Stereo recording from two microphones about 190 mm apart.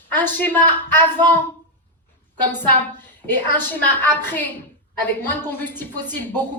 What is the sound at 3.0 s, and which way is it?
A woman's voice, 10° left (ahead or behind).